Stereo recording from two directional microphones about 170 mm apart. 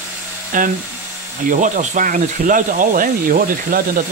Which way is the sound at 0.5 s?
50° right (ahead or behind).